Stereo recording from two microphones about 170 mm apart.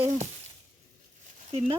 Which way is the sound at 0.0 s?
45° right (ahead or behind).